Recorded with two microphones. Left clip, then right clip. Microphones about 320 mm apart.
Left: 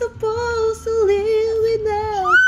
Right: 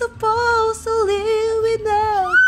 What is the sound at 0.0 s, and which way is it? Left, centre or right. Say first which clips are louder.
Music: right 3 dB; right.